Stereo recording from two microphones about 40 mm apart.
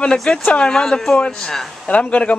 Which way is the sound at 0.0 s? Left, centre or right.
Left.